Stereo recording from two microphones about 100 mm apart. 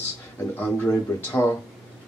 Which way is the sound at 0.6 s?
15° left (ahead or behind).